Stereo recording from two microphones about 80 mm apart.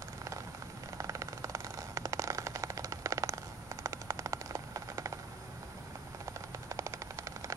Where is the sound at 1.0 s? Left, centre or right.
Right.